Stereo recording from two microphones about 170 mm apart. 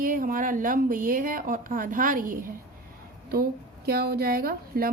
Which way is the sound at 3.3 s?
65° right (ahead or behind).